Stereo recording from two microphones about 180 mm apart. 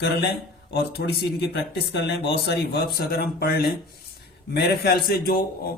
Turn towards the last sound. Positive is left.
turn(degrees=55)  # may be behind; listen again after turning